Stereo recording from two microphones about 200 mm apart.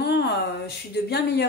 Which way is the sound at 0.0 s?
55° left (ahead or behind).